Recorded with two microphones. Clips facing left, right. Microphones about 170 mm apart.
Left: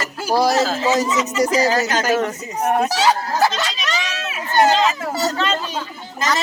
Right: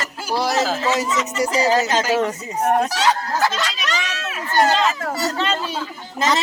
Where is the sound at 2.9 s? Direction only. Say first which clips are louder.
Left 2 dB; 30° left (ahead or behind).